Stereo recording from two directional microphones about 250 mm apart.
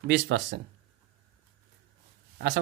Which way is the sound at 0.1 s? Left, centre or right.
Right.